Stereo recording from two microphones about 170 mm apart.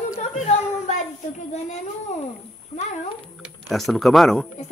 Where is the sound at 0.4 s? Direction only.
40° left (ahead or behind).